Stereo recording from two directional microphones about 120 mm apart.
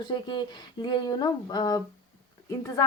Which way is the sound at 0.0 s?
40° left (ahead or behind).